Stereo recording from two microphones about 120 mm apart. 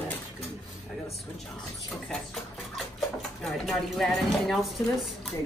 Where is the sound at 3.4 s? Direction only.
5° left (ahead or behind).